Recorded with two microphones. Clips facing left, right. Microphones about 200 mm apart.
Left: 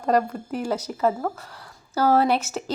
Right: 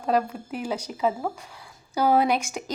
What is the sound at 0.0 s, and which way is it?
Speech, 5° right (ahead or behind).